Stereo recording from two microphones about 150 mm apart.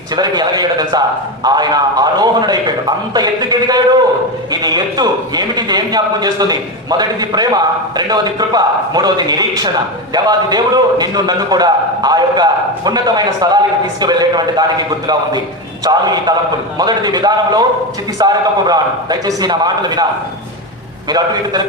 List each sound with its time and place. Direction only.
0.2 s a man's voice: 25° right (ahead or behind)